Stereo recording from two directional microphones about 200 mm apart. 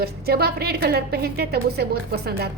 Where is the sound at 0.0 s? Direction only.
50° right (ahead or behind).